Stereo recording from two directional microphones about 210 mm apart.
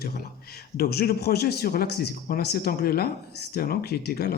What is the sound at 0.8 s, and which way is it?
A man's voice, 45° left (ahead or behind).